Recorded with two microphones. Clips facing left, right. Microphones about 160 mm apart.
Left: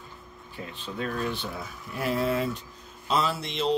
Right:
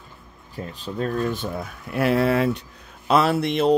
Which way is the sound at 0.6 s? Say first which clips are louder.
Right 6 dB; 40° right (ahead or behind).